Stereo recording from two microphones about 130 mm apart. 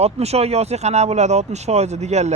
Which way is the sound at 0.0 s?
55° right (ahead or behind).